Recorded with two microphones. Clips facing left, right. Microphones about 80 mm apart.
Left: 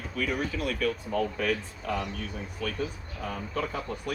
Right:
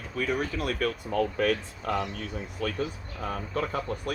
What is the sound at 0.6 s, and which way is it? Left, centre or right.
Speech, right.